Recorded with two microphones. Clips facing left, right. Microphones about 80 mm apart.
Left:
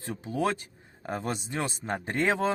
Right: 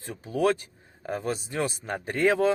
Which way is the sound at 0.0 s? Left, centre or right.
Left.